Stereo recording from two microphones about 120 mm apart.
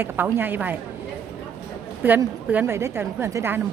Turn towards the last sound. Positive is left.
turn(degrees=-20)  # may be behind; listen again after turning